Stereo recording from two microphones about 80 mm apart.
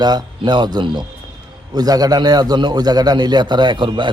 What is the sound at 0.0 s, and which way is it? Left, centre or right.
A man's voice, right.